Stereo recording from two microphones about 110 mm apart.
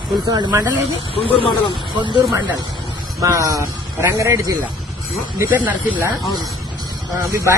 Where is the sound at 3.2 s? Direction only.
30° right (ahead or behind).